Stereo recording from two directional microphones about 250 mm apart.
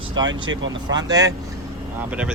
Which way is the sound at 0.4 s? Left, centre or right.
Right.